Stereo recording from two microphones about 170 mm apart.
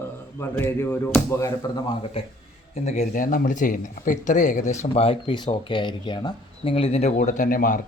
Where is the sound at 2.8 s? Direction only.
40° left (ahead or behind).